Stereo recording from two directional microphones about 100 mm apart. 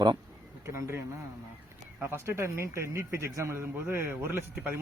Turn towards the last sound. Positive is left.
turn(degrees=-20)  # may be behind; listen again after turning